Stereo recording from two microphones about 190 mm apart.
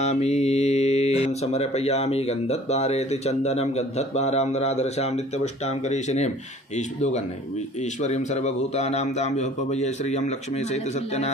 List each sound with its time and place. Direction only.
0.0 s speech: 35° left (ahead or behind)